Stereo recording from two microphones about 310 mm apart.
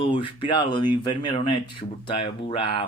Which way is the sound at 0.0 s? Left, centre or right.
Centre.